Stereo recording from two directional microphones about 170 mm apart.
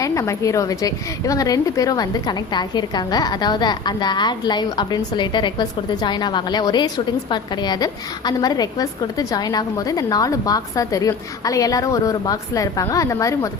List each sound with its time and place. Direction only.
0.0 s a woman's voice: 20° left (ahead or behind)